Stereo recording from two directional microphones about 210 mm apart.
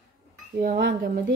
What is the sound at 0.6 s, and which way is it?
Speech, 45° right (ahead or behind).